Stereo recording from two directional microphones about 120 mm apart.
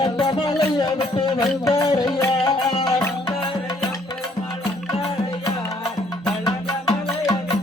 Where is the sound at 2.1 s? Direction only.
25° left (ahead or behind).